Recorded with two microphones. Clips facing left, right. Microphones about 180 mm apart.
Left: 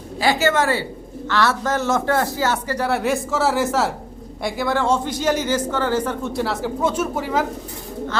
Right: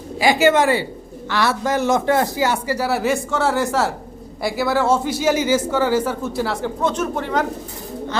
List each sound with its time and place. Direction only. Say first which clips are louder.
0.2 s speech: right 3 dB; 15° right (ahead or behind); by 7.4 s 5° left (ahead or behind)